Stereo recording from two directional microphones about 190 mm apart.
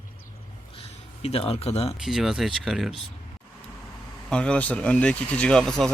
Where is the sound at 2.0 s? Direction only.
Centre (ahead or behind).